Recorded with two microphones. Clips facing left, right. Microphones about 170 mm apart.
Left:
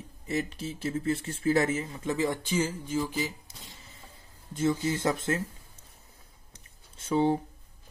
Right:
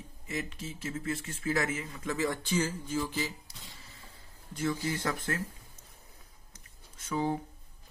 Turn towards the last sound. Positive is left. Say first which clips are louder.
# left 6 dB
turn(degrees=30)  # may be behind; listen again after turning